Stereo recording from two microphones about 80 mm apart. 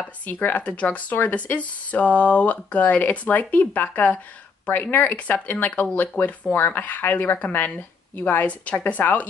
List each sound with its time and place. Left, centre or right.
0.2 s speech: left